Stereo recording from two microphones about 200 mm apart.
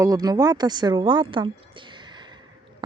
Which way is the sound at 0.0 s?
20° right (ahead or behind).